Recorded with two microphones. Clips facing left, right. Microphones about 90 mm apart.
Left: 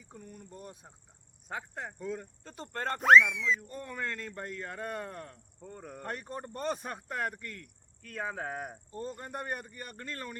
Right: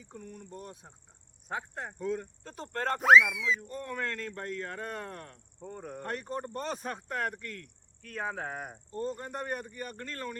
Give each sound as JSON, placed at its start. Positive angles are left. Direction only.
{"t": 0.0, "sound": "speech", "side_deg": 5}
{"t": 2.0, "sound": "speech", "side_deg": 0}
{"t": 5.6, "sound": "speech", "side_deg": -10}
{"t": 6.0, "sound": "speech", "side_deg": 5}
{"t": 8.0, "sound": "speech", "side_deg": 0}